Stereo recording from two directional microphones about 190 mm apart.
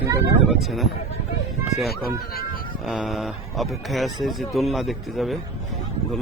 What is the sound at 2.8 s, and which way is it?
Speech, centre (ahead or behind).